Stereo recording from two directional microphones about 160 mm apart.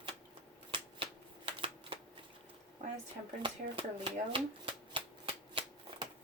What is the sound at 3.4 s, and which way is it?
Shuffling cards, 30° right (ahead or behind).